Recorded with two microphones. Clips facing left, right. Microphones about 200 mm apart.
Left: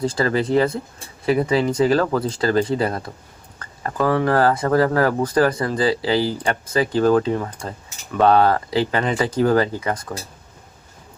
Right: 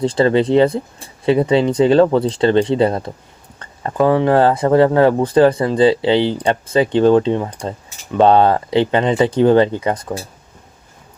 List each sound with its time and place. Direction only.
0.0 s speech: 30° right (ahead or behind)